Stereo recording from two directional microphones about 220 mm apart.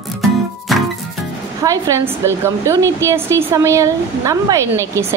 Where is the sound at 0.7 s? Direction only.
Centre (ahead or behind).